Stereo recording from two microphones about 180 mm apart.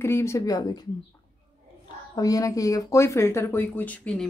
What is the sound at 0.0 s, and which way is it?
Speech, 15° left (ahead or behind).